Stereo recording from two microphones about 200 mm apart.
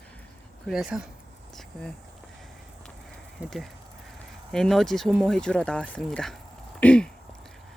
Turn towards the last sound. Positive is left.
turn(degrees=5)  # may be behind; listen again after turning